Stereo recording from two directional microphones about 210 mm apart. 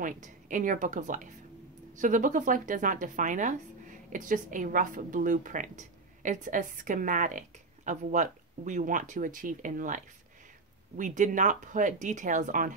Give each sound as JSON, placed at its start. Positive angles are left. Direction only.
{"t": 0.0, "sound": "a woman's voice", "side_deg": -40}